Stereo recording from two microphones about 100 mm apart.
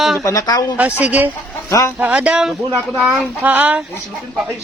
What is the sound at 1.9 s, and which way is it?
Speech, 15° right (ahead or behind).